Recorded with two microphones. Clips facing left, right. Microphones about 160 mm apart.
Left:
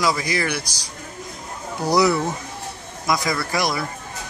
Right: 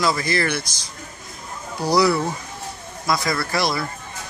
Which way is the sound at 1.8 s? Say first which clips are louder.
Even; 20° left (ahead or behind).